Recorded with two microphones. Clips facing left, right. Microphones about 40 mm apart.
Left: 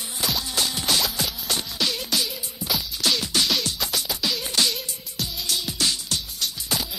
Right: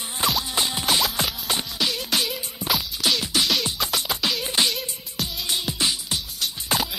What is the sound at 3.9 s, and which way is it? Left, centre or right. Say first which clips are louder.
Music: right 3 dB; right.